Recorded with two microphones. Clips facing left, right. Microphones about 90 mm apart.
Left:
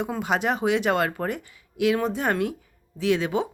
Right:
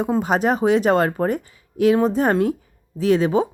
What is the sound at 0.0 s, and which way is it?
Speech, 35° right (ahead or behind).